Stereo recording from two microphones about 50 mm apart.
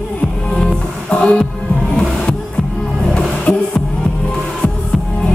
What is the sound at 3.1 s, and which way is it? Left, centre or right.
Music, centre.